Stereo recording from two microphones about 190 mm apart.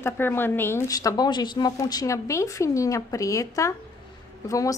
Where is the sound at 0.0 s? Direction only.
10° left (ahead or behind).